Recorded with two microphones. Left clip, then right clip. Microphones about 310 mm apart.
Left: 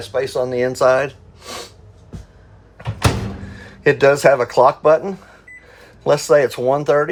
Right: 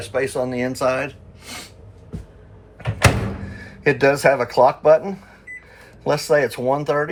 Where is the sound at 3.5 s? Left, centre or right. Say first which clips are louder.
Left 4 dB; left.